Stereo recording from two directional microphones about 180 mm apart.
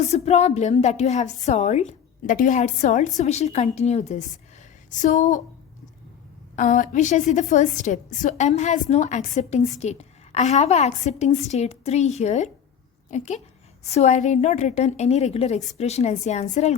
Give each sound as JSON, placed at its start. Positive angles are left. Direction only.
{"t": 0.0, "sound": "a woman's voice", "side_deg": 35}
{"t": 6.6, "sound": "a woman's voice", "side_deg": 45}